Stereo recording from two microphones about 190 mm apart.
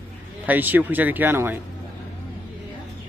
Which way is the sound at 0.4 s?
10° right (ahead or behind).